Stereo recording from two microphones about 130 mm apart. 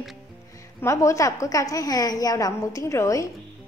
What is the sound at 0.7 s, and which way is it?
A woman's voice, 20° left (ahead or behind).